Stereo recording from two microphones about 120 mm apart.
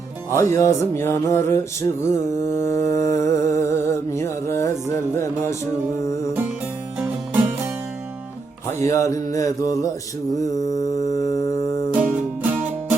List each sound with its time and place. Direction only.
0.3 s music: 25° left (ahead or behind)
7.0 s music: 15° right (ahead or behind)
8.8 s music: 25° left (ahead or behind)